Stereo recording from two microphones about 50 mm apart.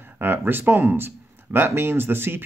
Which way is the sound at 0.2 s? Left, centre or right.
Right.